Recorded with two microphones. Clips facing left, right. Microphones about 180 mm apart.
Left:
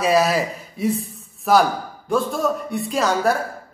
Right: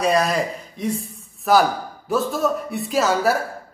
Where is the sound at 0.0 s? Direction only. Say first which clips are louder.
Left 1 dB; 5° left (ahead or behind).